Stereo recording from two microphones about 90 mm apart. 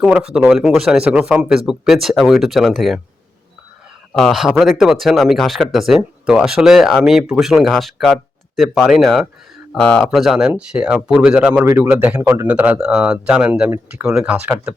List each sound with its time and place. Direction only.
0.0 s speech: 5° right (ahead or behind)
4.2 s speech: 5° right (ahead or behind)
11.6 s speech: 25° right (ahead or behind)